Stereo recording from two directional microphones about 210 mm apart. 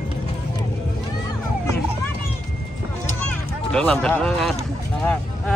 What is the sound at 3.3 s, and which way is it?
Speech, 5° left (ahead or behind).